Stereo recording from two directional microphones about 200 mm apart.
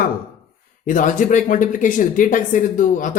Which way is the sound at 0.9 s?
40° left (ahead or behind).